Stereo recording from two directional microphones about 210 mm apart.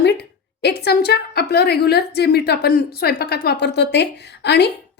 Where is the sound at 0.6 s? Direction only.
50° left (ahead or behind).